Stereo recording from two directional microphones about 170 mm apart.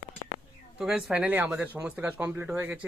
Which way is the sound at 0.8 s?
Centre (ahead or behind).